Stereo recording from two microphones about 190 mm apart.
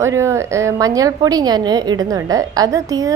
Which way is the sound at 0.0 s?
15° right (ahead or behind).